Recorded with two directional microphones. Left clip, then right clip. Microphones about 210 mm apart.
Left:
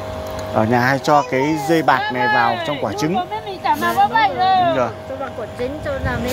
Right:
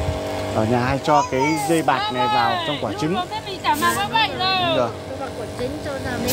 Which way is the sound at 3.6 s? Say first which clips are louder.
Left 4 dB; 50° right (ahead or behind).